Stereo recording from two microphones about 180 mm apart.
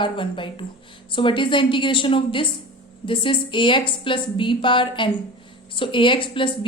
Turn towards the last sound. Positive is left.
turn(degrees=30)  # may be behind; listen again after turning